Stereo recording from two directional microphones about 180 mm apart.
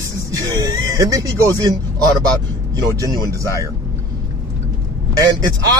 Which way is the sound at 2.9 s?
20° right (ahead or behind).